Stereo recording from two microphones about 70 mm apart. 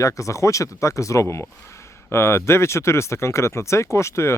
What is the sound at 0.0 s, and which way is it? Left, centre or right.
Speech, left.